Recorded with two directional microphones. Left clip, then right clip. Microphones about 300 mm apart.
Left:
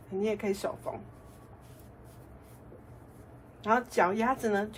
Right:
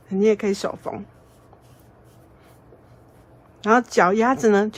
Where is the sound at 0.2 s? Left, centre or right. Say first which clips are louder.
Right 11 dB; right.